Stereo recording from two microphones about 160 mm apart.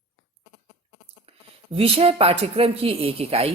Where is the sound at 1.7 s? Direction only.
35° right (ahead or behind).